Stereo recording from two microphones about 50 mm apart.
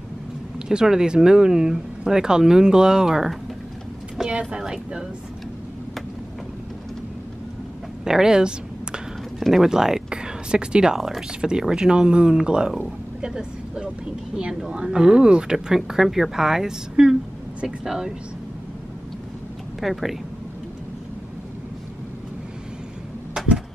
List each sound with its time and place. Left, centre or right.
0.7 s speech: centre
8.0 s a woman's voice: centre
19.8 s speech: centre